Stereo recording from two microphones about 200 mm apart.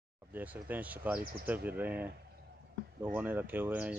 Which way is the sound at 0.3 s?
10° right (ahead or behind).